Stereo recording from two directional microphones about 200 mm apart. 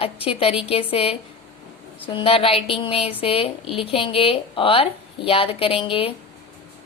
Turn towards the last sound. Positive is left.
turn(degrees=25)  # may be behind; listen again after turning